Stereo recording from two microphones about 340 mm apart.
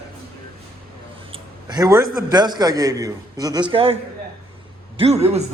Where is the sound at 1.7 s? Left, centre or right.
Centre.